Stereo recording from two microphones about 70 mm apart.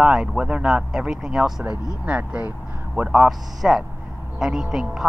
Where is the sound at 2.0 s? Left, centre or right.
Centre.